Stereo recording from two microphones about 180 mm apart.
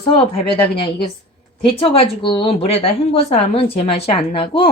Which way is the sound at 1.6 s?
30° left (ahead or behind).